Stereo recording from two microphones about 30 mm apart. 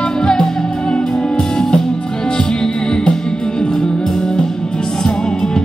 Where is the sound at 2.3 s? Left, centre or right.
Centre.